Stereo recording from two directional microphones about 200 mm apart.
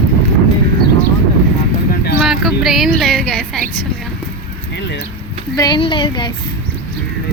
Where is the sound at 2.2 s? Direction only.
Centre (ahead or behind).